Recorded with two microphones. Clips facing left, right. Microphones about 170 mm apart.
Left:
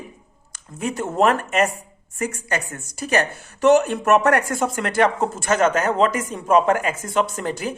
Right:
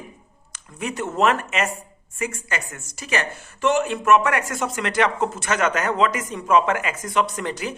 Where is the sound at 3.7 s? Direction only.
40° left (ahead or behind).